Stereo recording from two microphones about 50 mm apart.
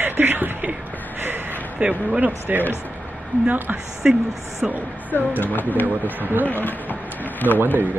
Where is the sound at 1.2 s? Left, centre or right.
Right.